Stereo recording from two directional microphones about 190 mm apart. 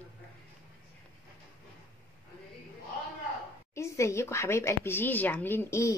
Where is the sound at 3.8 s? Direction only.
15° left (ahead or behind).